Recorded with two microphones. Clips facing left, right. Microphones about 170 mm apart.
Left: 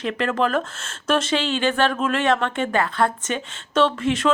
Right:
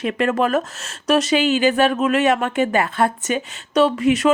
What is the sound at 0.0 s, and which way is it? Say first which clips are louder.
Speech: right 3 dB; 15° right (ahead or behind).